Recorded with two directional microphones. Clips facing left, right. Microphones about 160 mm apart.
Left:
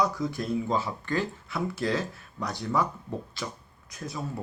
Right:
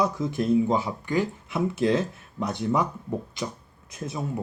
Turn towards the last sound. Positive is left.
turn(degrees=-25)  # may be behind; listen again after turning